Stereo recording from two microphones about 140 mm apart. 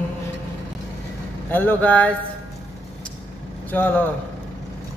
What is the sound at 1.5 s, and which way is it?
Speech, 10° left (ahead or behind).